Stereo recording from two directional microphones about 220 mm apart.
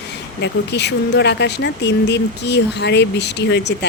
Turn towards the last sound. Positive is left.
turn(degrees=50)  # may be behind; listen again after turning